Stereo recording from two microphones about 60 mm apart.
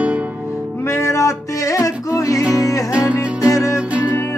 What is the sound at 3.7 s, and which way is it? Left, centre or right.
Music, right.